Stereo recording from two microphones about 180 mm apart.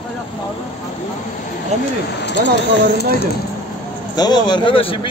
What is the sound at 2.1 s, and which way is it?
Speech, 75° left (ahead or behind).